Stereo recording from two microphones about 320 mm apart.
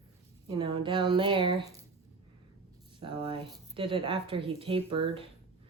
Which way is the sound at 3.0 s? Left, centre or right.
Centre.